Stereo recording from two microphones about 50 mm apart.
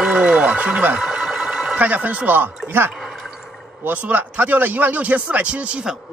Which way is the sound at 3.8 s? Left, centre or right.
Right.